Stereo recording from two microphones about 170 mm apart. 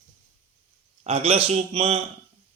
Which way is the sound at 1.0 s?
35° right (ahead or behind).